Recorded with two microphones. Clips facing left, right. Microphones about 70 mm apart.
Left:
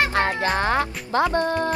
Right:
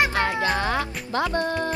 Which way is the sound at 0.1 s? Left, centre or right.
Left.